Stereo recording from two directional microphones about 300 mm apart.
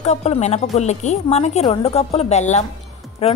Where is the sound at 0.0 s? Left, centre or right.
Left.